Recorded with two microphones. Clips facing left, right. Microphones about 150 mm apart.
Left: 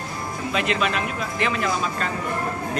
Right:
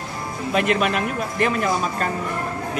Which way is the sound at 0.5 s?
50° right (ahead or behind).